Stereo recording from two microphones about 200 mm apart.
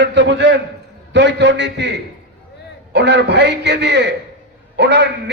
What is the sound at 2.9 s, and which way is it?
A man's voice, 60° right (ahead or behind).